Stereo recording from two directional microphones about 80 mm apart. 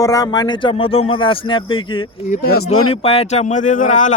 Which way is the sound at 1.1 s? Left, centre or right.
Left.